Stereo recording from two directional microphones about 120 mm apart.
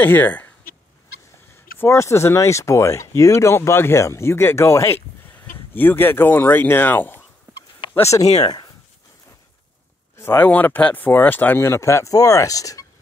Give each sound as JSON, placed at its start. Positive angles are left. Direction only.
{"t": 0.0, "sound": "speech", "side_deg": 15}
{"t": 1.8, "sound": "speech", "side_deg": 20}
{"t": 8.0, "sound": "speech", "side_deg": 30}
{"t": 10.1, "sound": "speech", "side_deg": 20}